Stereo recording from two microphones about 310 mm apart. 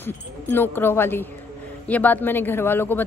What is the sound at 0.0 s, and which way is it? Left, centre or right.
Speech, centre.